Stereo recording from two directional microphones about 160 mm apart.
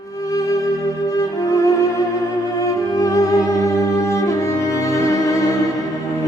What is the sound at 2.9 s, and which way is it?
Music, 20° left (ahead or behind).